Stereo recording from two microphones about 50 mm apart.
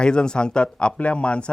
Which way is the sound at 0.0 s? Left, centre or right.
Centre.